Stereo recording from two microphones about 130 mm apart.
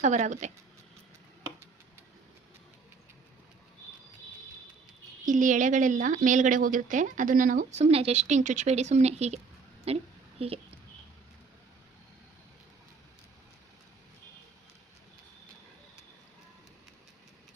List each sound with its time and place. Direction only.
0.0 s speech: 65° right (ahead or behind)
5.2 s a woman's voice: 80° right; by 10.6 s 50° right (ahead or behind)